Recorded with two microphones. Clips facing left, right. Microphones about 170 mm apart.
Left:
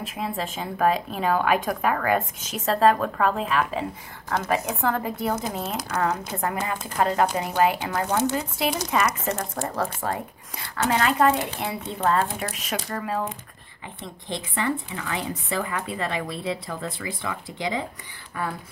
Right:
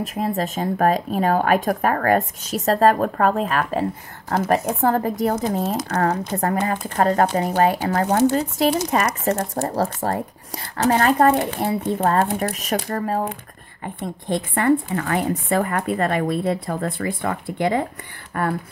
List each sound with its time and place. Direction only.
0.0 s a woman's voice: 45° right (ahead or behind)
5.9 s speech: 50° right (ahead or behind)
7.9 s speech: 60° right (ahead or behind)
8.9 s a woman's voice: 40° right (ahead or behind); by 18.5 s 60° right (ahead or behind)